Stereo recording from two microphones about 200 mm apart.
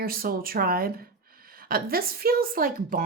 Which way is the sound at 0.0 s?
50° right (ahead or behind).